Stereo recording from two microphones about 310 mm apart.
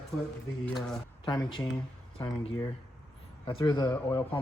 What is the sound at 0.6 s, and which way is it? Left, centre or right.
Speech, centre.